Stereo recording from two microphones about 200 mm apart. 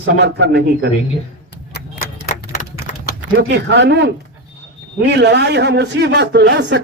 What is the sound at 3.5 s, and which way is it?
Speech, 60° right (ahead or behind).